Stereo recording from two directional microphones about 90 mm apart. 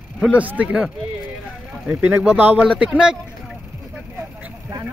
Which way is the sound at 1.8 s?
20° right (ahead or behind).